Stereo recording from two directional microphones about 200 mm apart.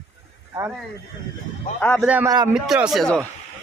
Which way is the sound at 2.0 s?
10° right (ahead or behind).